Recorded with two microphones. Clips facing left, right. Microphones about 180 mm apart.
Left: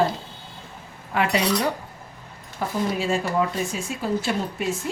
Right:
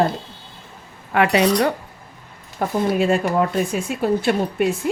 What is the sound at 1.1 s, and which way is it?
Speech, 65° right (ahead or behind).